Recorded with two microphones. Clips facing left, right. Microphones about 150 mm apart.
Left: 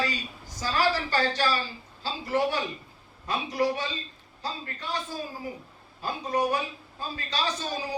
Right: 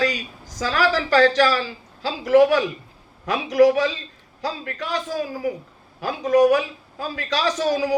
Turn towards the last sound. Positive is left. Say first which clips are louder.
# right 10 dB
turn(degrees=-90)